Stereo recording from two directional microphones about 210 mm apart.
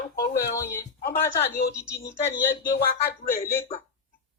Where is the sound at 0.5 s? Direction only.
15° left (ahead or behind).